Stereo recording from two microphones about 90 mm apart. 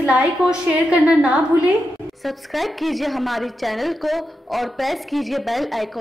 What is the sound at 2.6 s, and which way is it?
A woman's voice, centre (ahead or behind).